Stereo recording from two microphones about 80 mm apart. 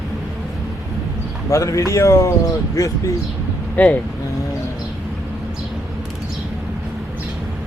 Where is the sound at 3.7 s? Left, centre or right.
Centre.